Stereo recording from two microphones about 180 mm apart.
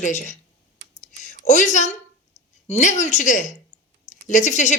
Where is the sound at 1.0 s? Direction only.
45° left (ahead or behind).